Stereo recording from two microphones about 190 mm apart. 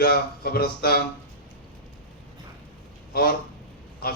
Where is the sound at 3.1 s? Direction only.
55° left (ahead or behind).